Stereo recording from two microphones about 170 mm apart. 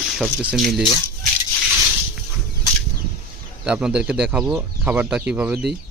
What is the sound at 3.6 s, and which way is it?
Speech, 5° right (ahead or behind).